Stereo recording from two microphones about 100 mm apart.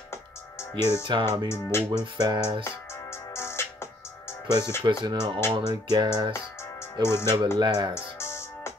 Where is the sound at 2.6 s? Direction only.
25° left (ahead or behind).